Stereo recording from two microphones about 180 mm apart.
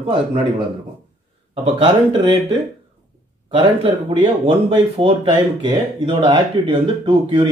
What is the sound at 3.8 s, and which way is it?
Speech, 35° right (ahead or behind).